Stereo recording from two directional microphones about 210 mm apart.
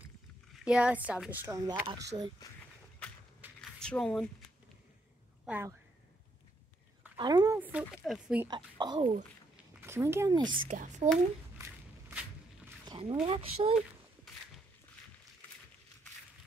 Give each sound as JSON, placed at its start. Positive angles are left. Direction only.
{"t": 0.7, "sound": "a woman's voice", "side_deg": -5}
{"t": 3.4, "sound": "a sound", "side_deg": -10}
{"t": 3.8, "sound": "speech", "side_deg": 5}
{"t": 5.4, "sound": "speech", "side_deg": -10}
{"t": 7.2, "sound": "a woman's voice", "side_deg": -20}
{"t": 8.5, "sound": "a child's voice", "side_deg": -20}
{"t": 10.7, "sound": "a child's voice", "side_deg": -35}
{"t": 11.5, "sound": "walk", "side_deg": -10}
{"t": 12.8, "sound": "speech", "side_deg": -20}